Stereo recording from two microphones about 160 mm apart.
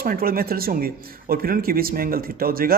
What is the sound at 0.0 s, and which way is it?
Speech, 70° right (ahead or behind).